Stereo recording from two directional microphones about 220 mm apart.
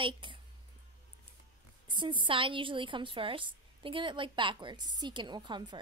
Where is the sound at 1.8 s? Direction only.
20° right (ahead or behind).